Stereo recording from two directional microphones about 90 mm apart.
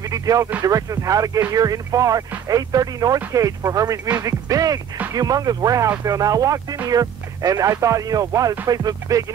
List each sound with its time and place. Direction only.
0.1 s speech: 40° right (ahead or behind)